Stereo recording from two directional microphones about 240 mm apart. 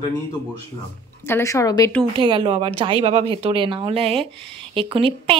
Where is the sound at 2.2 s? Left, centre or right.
Right.